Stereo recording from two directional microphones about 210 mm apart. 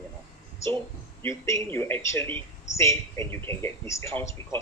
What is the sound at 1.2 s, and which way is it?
Speech, 10° left (ahead or behind).